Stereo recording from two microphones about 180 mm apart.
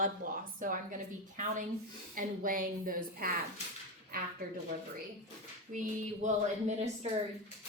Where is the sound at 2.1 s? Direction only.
50° right (ahead or behind).